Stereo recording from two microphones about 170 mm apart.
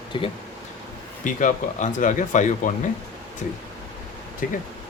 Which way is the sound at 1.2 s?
50° left (ahead or behind).